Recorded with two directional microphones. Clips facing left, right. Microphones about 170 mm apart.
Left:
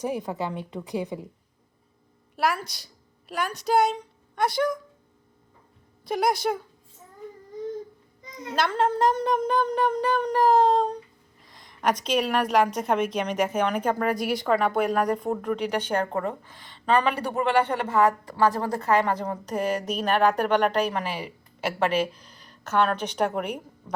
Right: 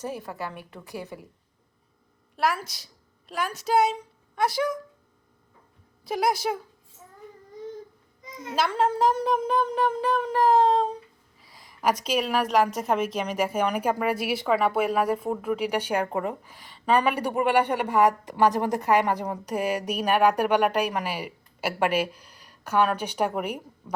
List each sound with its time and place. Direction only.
0.0 s a woman's voice: 15° left (ahead or behind)
2.3 s a woman's voice: centre (ahead or behind)
6.1 s a woman's voice: centre (ahead or behind)
8.4 s speech: 5° right (ahead or behind)